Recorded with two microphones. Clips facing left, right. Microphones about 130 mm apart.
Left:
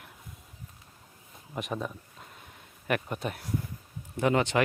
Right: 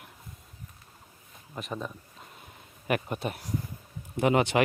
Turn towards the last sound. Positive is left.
turn(degrees=-15)  # may be behind; listen again after turning